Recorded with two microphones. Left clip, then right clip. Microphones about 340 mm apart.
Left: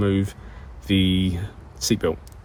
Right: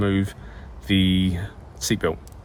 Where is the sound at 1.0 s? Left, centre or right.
Left.